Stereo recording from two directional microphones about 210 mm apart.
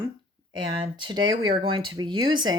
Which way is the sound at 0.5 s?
25° right (ahead or behind).